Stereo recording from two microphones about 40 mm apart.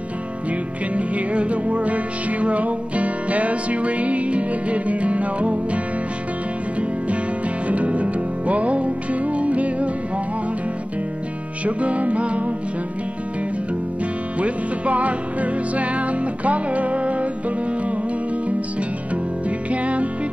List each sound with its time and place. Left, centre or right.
0.9 s music: right
7.6 s music: right
11.6 s music: right
14.4 s music: right
19.7 s music: right